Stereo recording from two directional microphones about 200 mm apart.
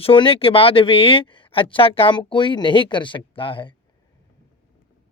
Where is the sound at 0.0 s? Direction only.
25° left (ahead or behind).